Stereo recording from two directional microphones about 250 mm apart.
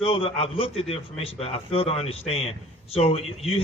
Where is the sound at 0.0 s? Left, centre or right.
Left.